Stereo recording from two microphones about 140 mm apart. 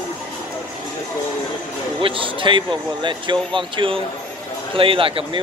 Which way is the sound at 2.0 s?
40° right (ahead or behind).